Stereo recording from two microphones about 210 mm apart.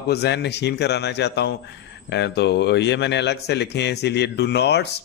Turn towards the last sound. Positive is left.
turn(degrees=50)  # may be behind; listen again after turning